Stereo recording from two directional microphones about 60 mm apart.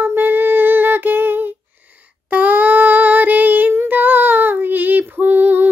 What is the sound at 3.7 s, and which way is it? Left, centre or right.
Child singing, right.